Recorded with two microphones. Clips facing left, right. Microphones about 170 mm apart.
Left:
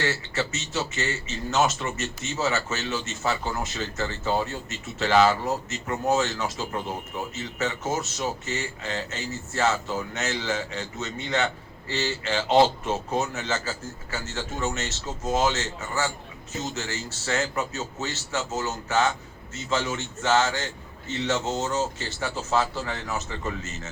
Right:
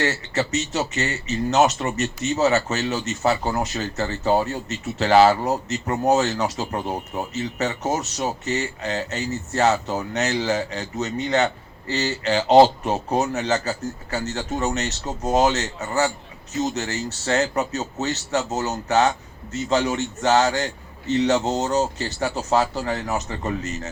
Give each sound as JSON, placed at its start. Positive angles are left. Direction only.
{"t": 0.0, "sound": "speech", "side_deg": -40}